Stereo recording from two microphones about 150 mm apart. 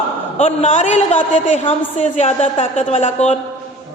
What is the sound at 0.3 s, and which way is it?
A man's voice, 50° left (ahead or behind).